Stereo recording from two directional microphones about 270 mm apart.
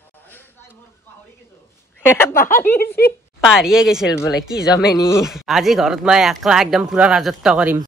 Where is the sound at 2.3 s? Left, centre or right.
Left.